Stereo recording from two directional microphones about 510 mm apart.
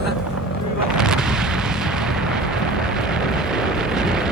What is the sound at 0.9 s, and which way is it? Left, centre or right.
Artillery fire, centre.